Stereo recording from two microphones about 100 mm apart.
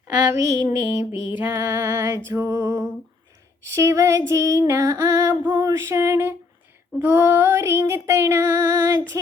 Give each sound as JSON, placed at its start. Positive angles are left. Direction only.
{"t": 0.3, "sound": "female singing", "side_deg": -30}